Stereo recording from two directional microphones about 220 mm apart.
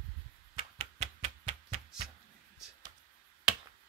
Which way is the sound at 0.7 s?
30° right (ahead or behind).